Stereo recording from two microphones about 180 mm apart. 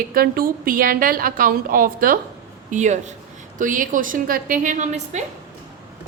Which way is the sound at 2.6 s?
40° right (ahead or behind).